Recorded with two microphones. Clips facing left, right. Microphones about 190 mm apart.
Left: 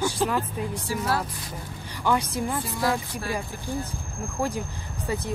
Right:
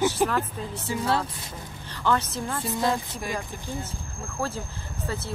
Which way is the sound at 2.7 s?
20° right (ahead or behind).